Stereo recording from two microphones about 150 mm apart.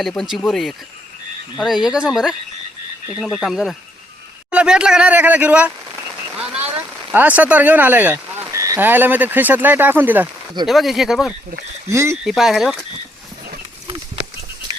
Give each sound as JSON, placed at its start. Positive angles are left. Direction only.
{"t": 0.2, "sound": "speech", "side_deg": 0}
{"t": 10.7, "sound": "speech", "side_deg": 0}
{"t": 11.9, "sound": "speech", "side_deg": -20}
{"t": 12.2, "sound": "speech", "side_deg": 0}